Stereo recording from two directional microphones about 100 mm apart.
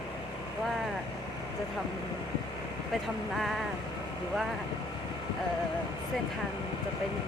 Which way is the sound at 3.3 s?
Centre (ahead or behind).